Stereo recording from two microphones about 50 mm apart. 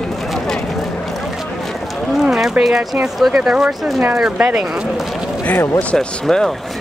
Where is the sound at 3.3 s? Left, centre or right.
Centre.